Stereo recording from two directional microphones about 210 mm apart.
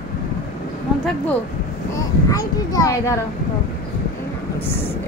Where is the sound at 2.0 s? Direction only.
15° left (ahead or behind).